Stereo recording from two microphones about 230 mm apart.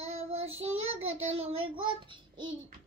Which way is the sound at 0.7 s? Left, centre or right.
Right.